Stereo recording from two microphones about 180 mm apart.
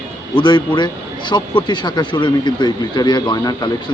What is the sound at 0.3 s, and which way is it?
Speech, 25° left (ahead or behind).